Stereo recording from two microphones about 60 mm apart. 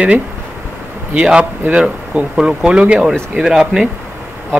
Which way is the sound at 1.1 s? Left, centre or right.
Centre.